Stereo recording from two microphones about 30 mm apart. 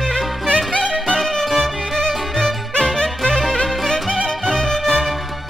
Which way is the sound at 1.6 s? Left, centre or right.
Left.